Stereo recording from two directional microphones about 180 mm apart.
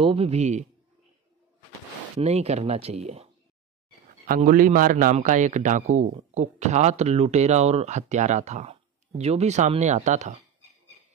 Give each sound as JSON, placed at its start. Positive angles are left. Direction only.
{"t": 0.0, "sound": "a man's voice", "side_deg": -30}
{"t": 2.2, "sound": "a man's voice", "side_deg": -35}
{"t": 4.3, "sound": "a man's voice", "side_deg": -50}